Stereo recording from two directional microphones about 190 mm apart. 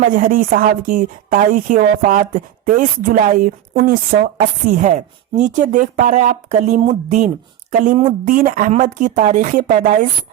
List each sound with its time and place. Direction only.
0.1 s a woman's voice: 45° right (ahead or behind)
8.3 s speech: 45° right (ahead or behind)